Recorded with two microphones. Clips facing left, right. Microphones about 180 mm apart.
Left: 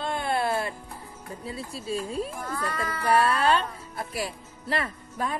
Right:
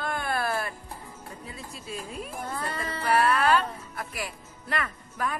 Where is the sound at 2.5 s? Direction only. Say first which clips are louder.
Left 2 dB; 30° right (ahead or behind).